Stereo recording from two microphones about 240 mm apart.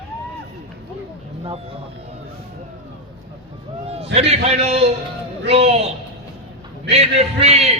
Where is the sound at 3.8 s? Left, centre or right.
Right.